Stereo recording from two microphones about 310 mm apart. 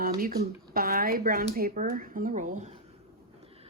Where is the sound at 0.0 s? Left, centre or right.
Right.